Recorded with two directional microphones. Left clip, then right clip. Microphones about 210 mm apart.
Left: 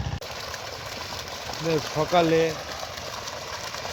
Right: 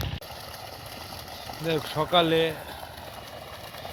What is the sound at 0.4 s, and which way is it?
Engine, 15° left (ahead or behind).